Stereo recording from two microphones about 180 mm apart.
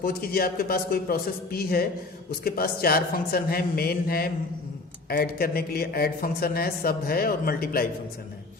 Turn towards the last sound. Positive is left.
turn(degrees=55)  # may be behind; listen again after turning